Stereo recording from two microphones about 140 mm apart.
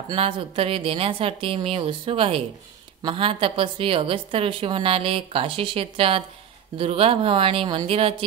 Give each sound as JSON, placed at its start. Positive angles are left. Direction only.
{"t": 0.1, "sound": "a woman's voice", "side_deg": -40}